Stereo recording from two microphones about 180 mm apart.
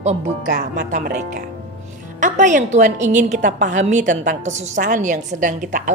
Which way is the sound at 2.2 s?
45° right (ahead or behind).